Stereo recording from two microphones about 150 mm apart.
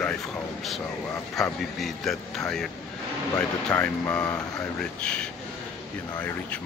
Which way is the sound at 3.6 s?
10° left (ahead or behind).